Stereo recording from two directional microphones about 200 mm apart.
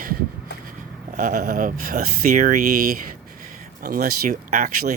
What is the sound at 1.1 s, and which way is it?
Speech, 35° right (ahead or behind).